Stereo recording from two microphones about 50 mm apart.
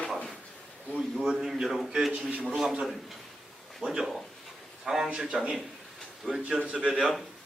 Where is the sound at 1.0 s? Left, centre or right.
Centre.